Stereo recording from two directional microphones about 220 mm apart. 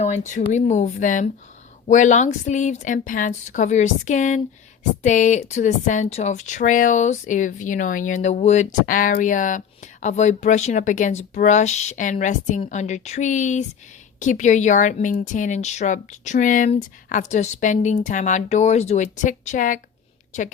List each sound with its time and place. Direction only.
0.0 s speech: 30° left (ahead or behind)